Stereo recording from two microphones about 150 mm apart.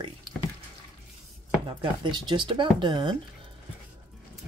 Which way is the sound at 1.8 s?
30° right (ahead or behind).